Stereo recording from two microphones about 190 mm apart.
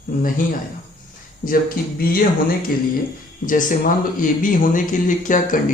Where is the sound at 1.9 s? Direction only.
50° left (ahead or behind).